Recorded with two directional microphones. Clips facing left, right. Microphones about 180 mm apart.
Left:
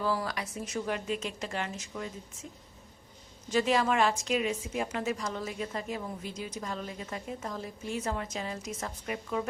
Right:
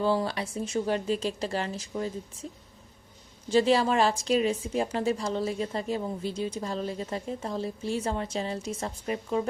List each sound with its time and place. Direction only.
0.0 s a woman's voice: 25° right (ahead or behind)
3.5 s a woman's voice: 30° right (ahead or behind)